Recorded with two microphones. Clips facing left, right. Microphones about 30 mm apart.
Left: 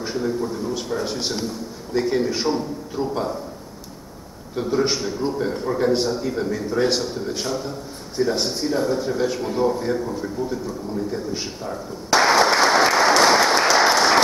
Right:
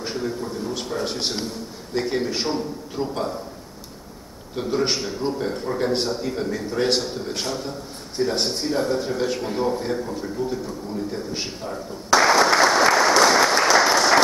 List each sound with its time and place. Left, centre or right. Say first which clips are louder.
0.0 s a sound: left 2 dB; centre
0.7 s a man's voice: left 1 dB; centre
4.6 s a man's voice: left 2 dB; centre
10.4 s speech: right 1 dB; right
11.1 s a man's voice: left 2 dB; centre
12.1 s applause: even; centre